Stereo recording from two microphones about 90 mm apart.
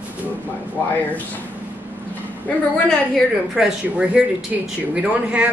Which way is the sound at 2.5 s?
10° left (ahead or behind).